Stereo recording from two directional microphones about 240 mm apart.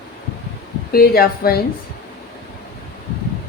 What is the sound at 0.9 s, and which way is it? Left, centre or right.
Speech, left.